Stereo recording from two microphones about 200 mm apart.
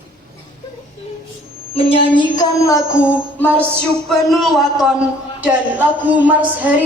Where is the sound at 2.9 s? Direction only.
10° left (ahead or behind).